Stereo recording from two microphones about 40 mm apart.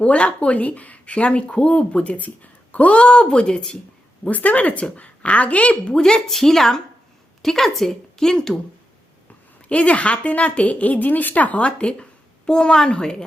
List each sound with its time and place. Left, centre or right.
0.0 s speech: left
4.3 s a woman's voice: left
5.8 s a woman's voice: centre
8.3 s speech: centre
9.6 s a woman's voice: left
11.6 s speech: left
12.5 s speech: centre